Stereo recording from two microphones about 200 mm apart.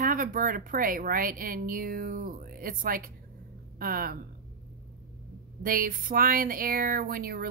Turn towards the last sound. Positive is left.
turn(degrees=-50)  # may be behind; listen again after turning